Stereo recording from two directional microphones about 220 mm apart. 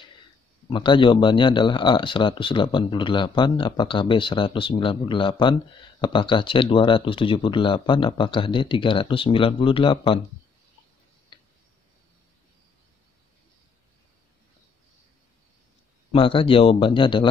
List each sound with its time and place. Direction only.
0.7 s speech: 20° left (ahead or behind)
11.3 s tick-tock: 20° left (ahead or behind)
16.1 s speech: 25° left (ahead or behind)